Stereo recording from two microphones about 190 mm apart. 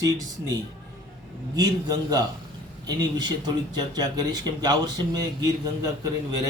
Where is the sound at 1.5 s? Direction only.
20° right (ahead or behind).